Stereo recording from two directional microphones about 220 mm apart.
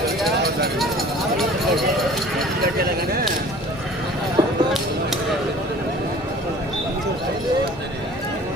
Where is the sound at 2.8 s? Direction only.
45° right (ahead or behind).